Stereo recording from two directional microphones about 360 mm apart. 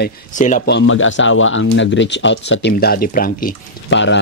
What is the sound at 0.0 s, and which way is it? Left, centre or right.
Speech, left.